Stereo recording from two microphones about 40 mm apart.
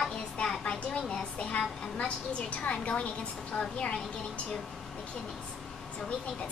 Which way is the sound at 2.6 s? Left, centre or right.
Left.